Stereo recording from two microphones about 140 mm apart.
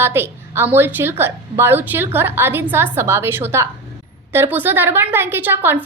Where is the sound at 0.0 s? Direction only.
15° right (ahead or behind).